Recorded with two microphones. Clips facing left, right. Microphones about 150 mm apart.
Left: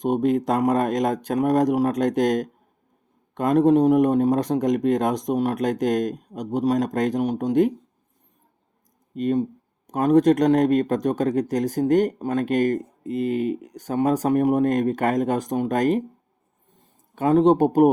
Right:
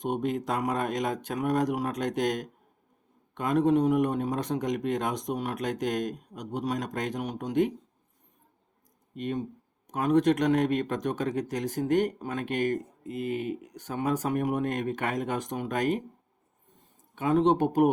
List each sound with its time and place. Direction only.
0.0 s a man's voice: 40° left (ahead or behind)
9.1 s a man's voice: 40° left (ahead or behind)
17.2 s a man's voice: 40° left (ahead or behind)